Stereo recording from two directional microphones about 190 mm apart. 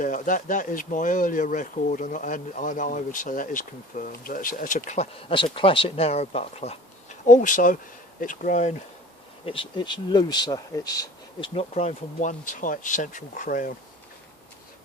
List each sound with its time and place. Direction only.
0.0 s speech: 45° left (ahead or behind)
5.3 s speech: 25° left (ahead or behind)
9.5 s speech: 25° left (ahead or behind); by 13.7 s 45° left (ahead or behind)